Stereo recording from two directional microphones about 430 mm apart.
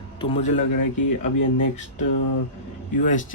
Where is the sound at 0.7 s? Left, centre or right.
Left.